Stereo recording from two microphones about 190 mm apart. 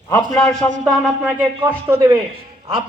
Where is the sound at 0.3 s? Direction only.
5° left (ahead or behind).